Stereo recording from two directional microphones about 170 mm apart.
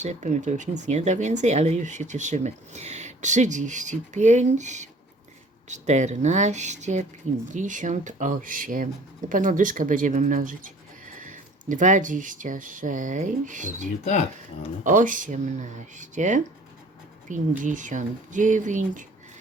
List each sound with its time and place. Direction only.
0.0 s speech: 45° right (ahead or behind)
14.0 s speech: 40° left (ahead or behind)
14.8 s speech: 50° right (ahead or behind)
17.6 s speech: 50° right (ahead or behind)